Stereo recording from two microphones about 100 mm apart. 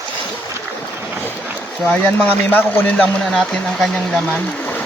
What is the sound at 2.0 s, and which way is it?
Speech, 20° left (ahead or behind).